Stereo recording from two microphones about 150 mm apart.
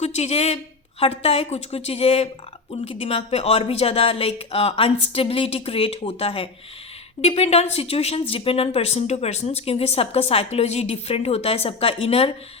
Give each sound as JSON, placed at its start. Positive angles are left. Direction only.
{"t": 0.0, "sound": "speech", "side_deg": 45}